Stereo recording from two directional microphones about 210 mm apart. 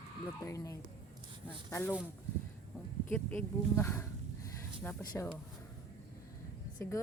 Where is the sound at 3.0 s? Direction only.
5° left (ahead or behind).